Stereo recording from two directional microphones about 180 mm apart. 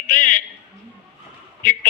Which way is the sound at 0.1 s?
45° left (ahead or behind).